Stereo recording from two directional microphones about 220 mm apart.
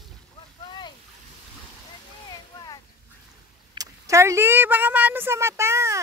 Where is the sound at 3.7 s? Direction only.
15° right (ahead or behind).